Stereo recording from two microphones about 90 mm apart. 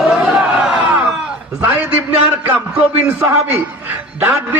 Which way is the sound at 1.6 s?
20° right (ahead or behind).